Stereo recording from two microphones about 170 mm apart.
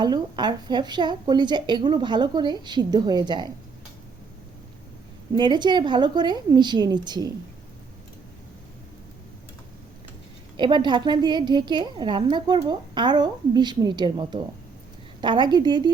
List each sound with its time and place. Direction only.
0.0 s a woman's voice: 25° right (ahead or behind)
5.3 s a woman's voice: 25° right (ahead or behind)
10.6 s a woman's voice: 25° right (ahead or behind)